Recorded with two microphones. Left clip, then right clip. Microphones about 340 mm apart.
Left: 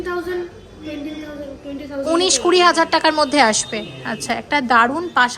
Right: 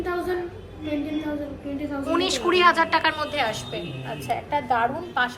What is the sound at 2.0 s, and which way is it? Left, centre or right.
A woman's voice, centre.